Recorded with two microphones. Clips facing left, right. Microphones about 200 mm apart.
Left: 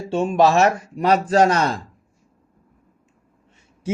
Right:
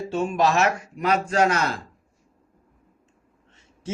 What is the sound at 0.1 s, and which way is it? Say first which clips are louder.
Speech: left 6 dB; 30° left (ahead or behind).